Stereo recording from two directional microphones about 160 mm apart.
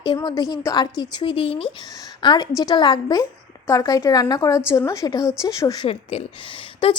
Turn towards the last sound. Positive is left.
turn(degrees=35)  # may be behind; listen again after turning